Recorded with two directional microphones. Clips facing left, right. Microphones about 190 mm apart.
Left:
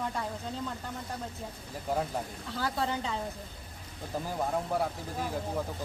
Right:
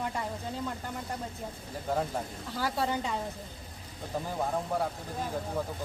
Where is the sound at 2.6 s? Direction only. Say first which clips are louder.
Right 1 dB; 10° right (ahead or behind).